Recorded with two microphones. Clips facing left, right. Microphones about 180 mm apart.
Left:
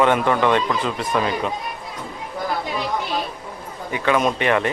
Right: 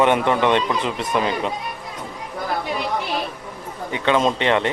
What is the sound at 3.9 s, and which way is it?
Speech, 25° right (ahead or behind).